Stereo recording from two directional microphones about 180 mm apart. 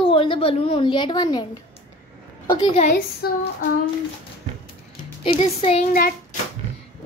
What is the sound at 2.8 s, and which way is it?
Speech, 50° left (ahead or behind).